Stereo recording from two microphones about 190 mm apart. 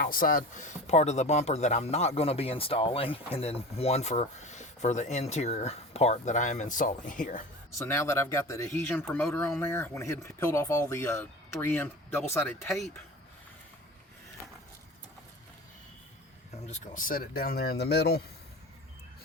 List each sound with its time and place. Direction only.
0.0 s speech: 50° left (ahead or behind)
7.8 s speech: 15° left (ahead or behind)
16.6 s speech: 40° left (ahead or behind); by 18.2 s 60° left (ahead or behind)